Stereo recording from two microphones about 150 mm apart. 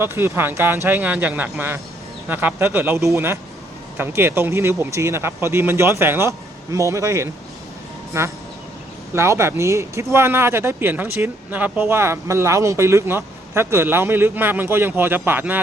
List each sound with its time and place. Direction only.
0.0 s speech: 15° right (ahead or behind)